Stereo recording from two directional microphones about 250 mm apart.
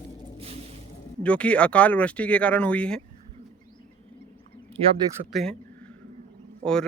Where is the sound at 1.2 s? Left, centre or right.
Centre.